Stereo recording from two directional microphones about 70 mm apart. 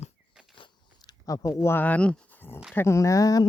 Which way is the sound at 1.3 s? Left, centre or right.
Left.